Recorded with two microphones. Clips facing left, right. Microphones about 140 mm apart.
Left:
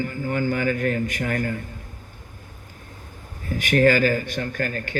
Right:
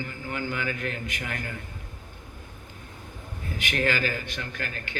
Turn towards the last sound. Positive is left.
turn(degrees=45)  # may be behind; listen again after turning